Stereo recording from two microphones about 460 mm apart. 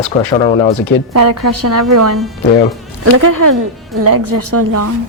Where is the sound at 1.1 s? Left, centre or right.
Right.